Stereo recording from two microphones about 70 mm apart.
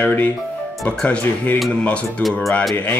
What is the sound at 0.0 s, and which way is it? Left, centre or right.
Speech, left.